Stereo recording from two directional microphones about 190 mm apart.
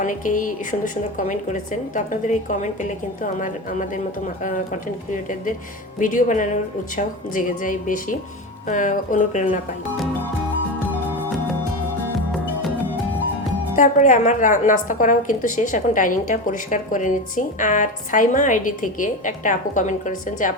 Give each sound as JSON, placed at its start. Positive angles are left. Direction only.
{"t": 0.0, "sound": "a woman's voice", "side_deg": 45}
{"t": 6.0, "sound": "a woman's voice", "side_deg": 45}
{"t": 12.0, "sound": "music", "side_deg": 0}
{"t": 13.7, "sound": "a woman's voice", "side_deg": 40}